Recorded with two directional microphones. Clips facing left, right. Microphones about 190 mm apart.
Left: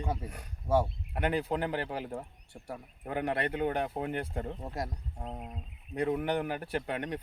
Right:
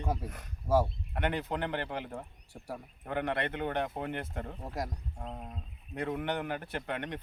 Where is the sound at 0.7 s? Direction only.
5° right (ahead or behind).